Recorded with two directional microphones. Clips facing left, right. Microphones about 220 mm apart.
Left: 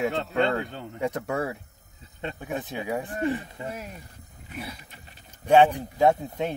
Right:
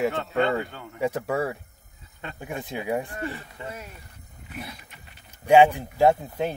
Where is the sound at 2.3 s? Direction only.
10° right (ahead or behind).